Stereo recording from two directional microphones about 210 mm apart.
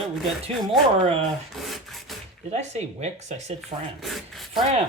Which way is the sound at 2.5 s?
30° right (ahead or behind).